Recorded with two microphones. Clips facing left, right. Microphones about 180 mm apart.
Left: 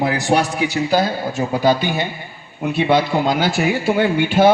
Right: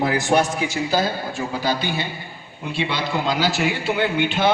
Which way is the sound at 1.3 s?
45° left (ahead or behind).